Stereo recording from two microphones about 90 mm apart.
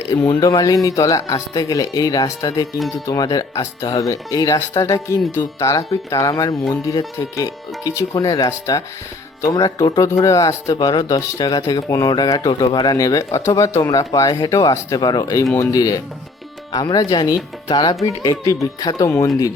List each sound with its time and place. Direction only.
0.3 s speech: 45° left (ahead or behind)
9.6 s speech: 50° left (ahead or behind)
17.7 s speech: 60° left (ahead or behind)
18.0 s speech: 45° left (ahead or behind)